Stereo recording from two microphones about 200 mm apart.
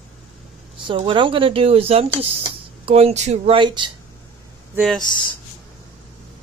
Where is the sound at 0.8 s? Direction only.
25° right (ahead or behind).